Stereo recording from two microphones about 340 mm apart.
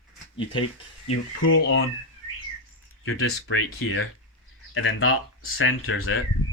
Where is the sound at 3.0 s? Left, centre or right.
Left.